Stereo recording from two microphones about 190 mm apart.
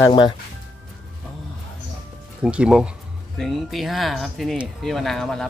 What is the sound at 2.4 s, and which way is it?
Speech, 5° right (ahead or behind).